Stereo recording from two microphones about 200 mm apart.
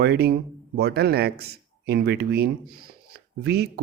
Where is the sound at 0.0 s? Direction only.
55° right (ahead or behind).